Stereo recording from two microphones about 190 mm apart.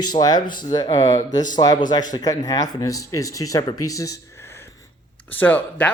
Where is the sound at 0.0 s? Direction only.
20° left (ahead or behind).